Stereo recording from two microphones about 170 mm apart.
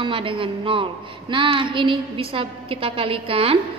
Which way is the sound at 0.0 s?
30° right (ahead or behind).